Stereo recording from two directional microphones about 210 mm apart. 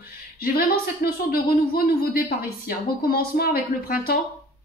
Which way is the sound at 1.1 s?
45° left (ahead or behind).